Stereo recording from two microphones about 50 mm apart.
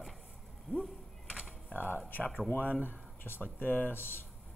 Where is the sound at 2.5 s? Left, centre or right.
Left.